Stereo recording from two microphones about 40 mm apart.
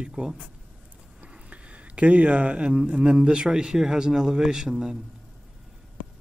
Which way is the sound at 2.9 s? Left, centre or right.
Right.